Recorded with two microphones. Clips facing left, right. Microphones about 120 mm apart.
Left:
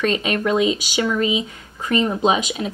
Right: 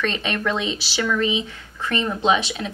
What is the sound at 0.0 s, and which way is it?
Speech, 10° left (ahead or behind).